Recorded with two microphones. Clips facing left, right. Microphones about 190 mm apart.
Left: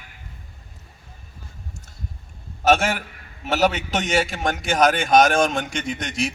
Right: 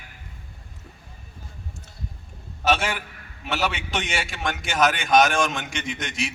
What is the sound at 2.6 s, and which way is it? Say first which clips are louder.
A man's voice: left 5 dB; 45° left (ahead or behind).